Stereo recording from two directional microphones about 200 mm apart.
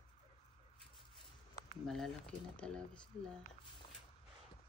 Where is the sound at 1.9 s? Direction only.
5° left (ahead or behind).